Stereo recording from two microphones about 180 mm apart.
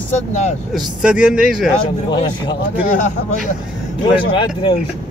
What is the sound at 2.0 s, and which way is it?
Speech, 25° left (ahead or behind).